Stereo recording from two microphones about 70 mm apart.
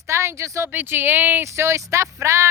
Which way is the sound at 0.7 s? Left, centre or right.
Right.